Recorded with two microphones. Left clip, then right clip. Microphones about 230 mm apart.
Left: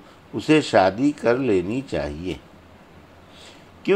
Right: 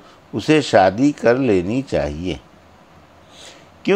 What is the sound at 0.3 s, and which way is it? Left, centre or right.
A man's voice, right.